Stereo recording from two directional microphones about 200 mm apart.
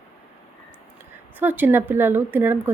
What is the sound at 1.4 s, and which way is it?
Speech, 10° right (ahead or behind).